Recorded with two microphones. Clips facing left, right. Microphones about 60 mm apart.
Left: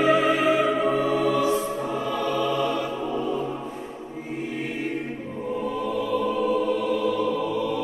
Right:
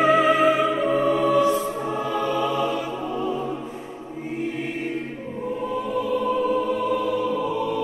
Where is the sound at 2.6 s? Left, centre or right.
Centre.